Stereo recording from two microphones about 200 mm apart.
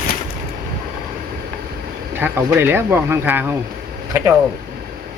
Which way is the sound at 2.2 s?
10° right (ahead or behind).